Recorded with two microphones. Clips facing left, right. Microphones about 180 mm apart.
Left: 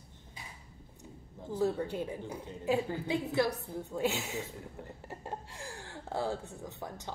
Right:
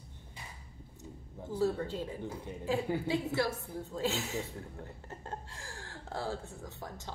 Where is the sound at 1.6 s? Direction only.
15° left (ahead or behind).